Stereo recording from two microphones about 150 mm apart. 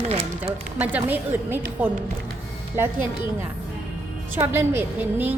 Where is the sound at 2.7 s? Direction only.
15° right (ahead or behind).